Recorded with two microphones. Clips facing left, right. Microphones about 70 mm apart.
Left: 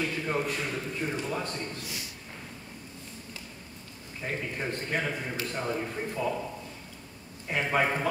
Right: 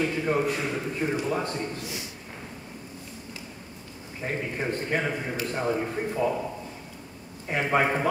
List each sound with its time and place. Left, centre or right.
0.0 s a man's voice: centre
4.6 s a man's voice: right
7.6 s a man's voice: centre